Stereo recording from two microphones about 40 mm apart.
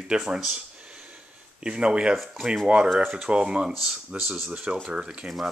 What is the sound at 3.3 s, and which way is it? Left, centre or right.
Speech, right.